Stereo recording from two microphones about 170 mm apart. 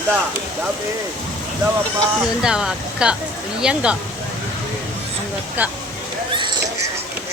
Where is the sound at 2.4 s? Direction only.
5° right (ahead or behind).